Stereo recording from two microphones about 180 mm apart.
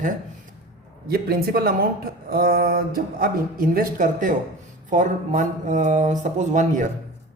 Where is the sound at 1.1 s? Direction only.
60° right (ahead or behind); by 6.8 s 40° right (ahead or behind).